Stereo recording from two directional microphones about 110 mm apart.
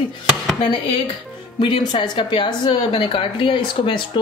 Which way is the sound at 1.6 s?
45° left (ahead or behind).